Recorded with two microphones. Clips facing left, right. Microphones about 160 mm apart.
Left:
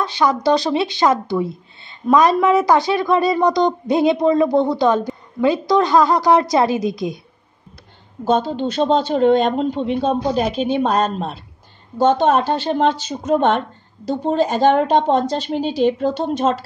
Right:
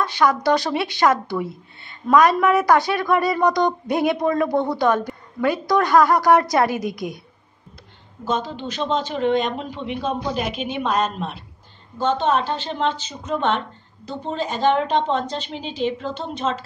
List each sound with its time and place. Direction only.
0.0 s speech: 25° left (ahead or behind)
8.5 s speech: 35° left (ahead or behind)
12.0 s speech: 45° left (ahead or behind)